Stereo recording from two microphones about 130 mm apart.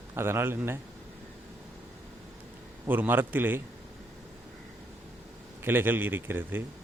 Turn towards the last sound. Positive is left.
turn(degrees=-15)  # may be behind; listen again after turning